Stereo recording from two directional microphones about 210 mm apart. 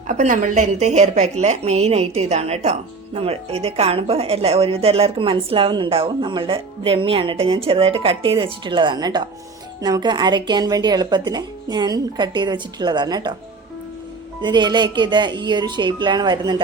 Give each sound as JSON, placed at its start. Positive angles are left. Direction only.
{"t": 0.1, "sound": "a woman's voice", "side_deg": -35}
{"t": 14.4, "sound": "a woman's voice", "side_deg": -20}